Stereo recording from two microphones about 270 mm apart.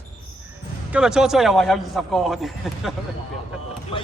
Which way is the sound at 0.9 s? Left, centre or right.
Centre.